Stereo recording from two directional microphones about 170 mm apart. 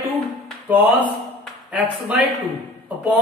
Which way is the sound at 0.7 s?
10° right (ahead or behind).